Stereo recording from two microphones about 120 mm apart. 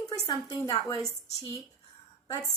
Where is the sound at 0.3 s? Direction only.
30° left (ahead or behind).